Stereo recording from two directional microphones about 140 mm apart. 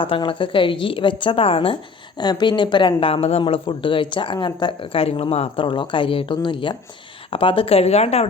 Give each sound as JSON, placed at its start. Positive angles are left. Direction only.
{"t": 0.0, "sound": "a woman's voice", "side_deg": 40}